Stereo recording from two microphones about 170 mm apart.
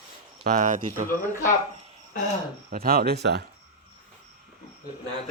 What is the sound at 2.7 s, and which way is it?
Speech, 60° right (ahead or behind).